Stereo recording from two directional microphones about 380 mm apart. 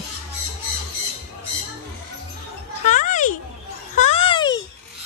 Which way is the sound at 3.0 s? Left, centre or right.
Centre.